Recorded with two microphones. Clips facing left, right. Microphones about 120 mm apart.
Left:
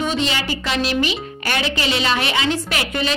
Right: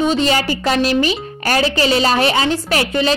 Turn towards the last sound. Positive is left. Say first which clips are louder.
# right 6 dB
turn(degrees=-35)  # may be behind; listen again after turning